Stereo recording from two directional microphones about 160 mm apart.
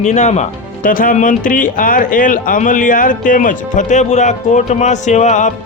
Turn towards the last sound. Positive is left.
turn(degrees=50)  # may be behind; listen again after turning